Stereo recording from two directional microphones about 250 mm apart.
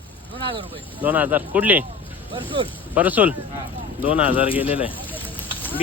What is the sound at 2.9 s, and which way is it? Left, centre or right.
Speech, centre.